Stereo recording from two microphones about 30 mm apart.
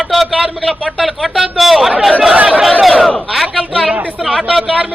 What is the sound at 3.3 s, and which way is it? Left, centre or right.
A man's voice, centre.